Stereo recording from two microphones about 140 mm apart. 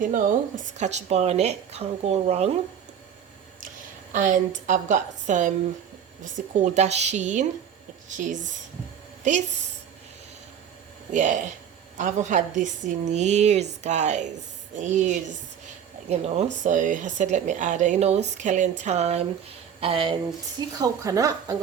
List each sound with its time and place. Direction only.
0.0 s a woman's voice: 70° right (ahead or behind); by 2.5 s 50° right (ahead or behind)
4.1 s speech: 65° right (ahead or behind)
6.6 s speech: 55° right (ahead or behind)
11.1 s speech: 60° right (ahead or behind); by 20.1 s 40° right (ahead or behind)
20.6 s speech: 25° right (ahead or behind)